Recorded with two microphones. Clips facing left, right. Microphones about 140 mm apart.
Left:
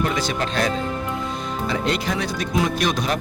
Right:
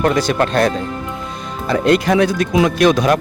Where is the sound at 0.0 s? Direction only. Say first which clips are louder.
Right 8 dB; 55° right (ahead or behind).